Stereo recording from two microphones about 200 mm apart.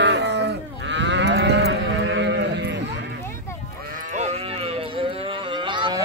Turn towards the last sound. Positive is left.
turn(degrees=-20)  # may be behind; listen again after turning